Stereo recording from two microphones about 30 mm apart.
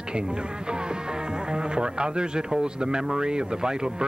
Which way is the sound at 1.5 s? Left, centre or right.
Right.